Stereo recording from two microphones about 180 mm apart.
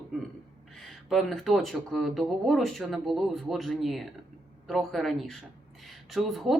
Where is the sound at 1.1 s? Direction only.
Centre (ahead or behind).